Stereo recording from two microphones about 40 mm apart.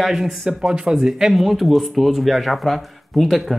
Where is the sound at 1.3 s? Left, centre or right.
Centre.